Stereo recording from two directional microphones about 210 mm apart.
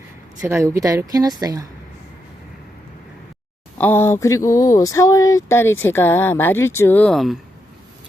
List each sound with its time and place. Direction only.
0.4 s speech: 15° right (ahead or behind)
3.8 s speech: 10° left (ahead or behind)